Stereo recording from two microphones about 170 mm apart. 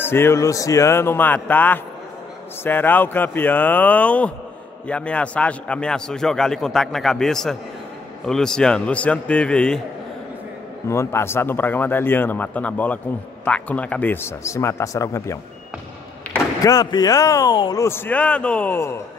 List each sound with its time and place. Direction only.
0.0 s a man's voice: 15° left (ahead or behind)
10.9 s speech: 15° left (ahead or behind)
16.6 s speech: 20° left (ahead or behind)